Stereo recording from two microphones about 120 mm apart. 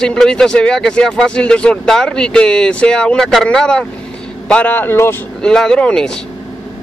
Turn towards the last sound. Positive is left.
turn(degrees=10)  # may be behind; listen again after turning